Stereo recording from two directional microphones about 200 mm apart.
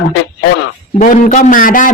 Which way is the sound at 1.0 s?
40° left (ahead or behind).